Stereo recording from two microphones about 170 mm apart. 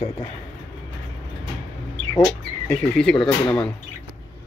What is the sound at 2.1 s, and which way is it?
Speech, 10° left (ahead or behind).